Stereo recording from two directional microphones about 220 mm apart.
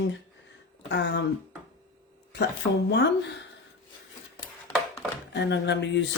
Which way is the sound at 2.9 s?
50° left (ahead or behind).